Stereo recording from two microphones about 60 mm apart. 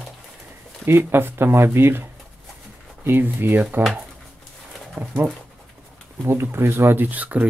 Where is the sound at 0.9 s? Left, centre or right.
Right.